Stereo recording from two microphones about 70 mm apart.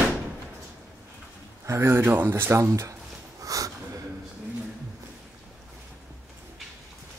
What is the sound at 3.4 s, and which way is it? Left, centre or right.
Snort, right.